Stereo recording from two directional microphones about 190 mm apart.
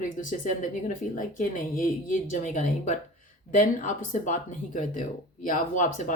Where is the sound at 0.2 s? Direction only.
40° left (ahead or behind).